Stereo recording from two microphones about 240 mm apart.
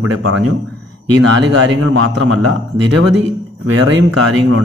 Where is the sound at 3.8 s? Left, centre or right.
Right.